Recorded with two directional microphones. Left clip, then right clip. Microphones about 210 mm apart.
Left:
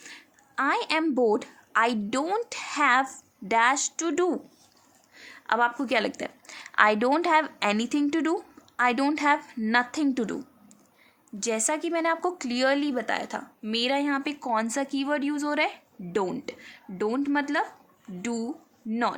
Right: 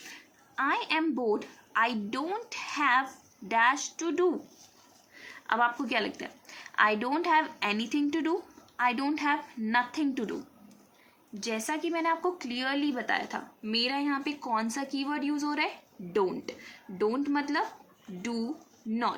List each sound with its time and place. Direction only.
0.1 s a woman's voice: 55° left (ahead or behind)
11.3 s speech: 55° left (ahead or behind)
18.9 s speech: 45° left (ahead or behind)